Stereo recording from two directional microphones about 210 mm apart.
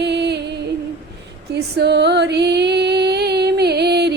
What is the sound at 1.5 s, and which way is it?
Music, 50° right (ahead or behind).